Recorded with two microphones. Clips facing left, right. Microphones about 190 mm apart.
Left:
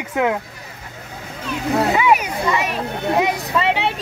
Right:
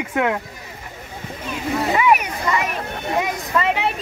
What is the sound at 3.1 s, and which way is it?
Speech, 90° left.